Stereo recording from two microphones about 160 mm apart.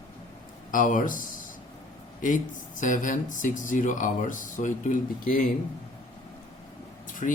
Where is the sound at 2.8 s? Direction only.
55° left (ahead or behind).